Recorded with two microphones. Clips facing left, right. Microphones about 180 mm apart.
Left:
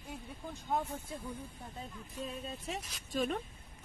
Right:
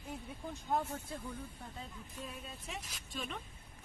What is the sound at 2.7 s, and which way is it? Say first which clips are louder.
Speech: left 7 dB; 40° left (ahead or behind).